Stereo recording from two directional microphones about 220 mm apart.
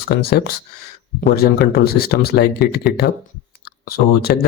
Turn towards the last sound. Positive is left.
turn(degrees=45)  # may be behind; listen again after turning